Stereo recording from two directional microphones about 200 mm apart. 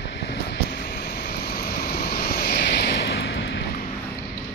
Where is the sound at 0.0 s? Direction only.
55° left (ahead or behind).